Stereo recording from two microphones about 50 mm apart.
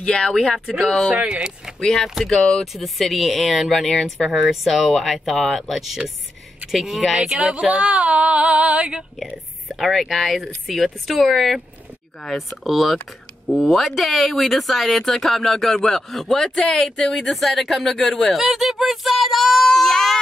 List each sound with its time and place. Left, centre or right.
0.0 s speech: centre
1.1 s a sound: right
1.8 s speech: centre
2.6 s speech: centre
7.5 s a sound: right
9.8 s speech: centre